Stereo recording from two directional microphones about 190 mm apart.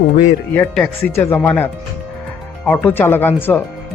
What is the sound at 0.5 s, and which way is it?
Speech, 5° left (ahead or behind).